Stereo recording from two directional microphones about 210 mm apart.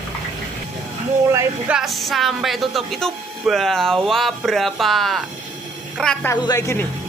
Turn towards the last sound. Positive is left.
turn(degrees=15)  # may be behind; listen again after turning